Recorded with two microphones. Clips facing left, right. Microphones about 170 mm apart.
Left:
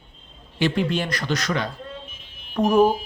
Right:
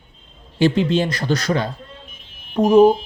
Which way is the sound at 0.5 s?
30° right (ahead or behind).